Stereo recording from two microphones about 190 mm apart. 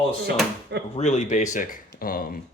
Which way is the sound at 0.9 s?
35° left (ahead or behind).